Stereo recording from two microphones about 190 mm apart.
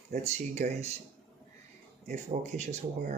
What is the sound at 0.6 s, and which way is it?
Speech, 35° right (ahead or behind).